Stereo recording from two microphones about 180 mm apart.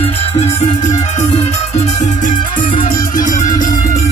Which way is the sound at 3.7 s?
20° left (ahead or behind).